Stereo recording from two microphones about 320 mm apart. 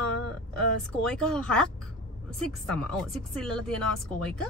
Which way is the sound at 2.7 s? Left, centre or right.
Centre.